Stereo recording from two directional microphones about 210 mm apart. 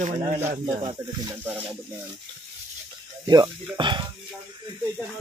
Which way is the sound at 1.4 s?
10° right (ahead or behind).